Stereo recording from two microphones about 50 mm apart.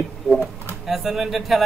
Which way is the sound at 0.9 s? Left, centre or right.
Centre.